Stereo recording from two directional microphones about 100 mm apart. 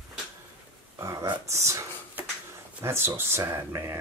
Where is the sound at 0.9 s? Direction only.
30° right (ahead or behind).